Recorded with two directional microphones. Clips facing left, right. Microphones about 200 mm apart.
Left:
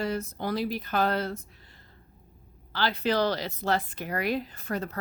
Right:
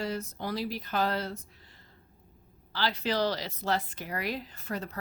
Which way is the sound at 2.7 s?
55° left (ahead or behind).